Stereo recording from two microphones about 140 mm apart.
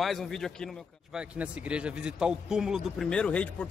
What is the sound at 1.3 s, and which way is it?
A man's voice, 10° right (ahead or behind).